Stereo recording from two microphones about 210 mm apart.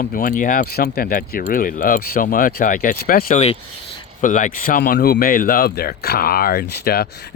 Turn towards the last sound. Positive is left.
turn(degrees=50)  # may be behind; listen again after turning